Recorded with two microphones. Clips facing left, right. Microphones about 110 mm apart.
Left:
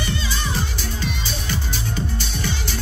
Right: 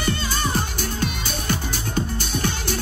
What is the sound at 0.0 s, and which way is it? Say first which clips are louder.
Music: right 2 dB; 50° right (ahead or behind).